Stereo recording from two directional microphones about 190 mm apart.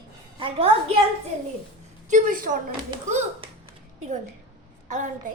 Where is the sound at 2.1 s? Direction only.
45° right (ahead or behind).